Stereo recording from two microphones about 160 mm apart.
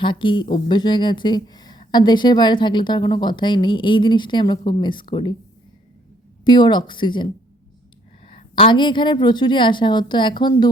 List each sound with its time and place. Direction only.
0.0 s speech: 30° left (ahead or behind)
6.4 s speech: 30° left (ahead or behind)
8.3 s speech: 30° left (ahead or behind)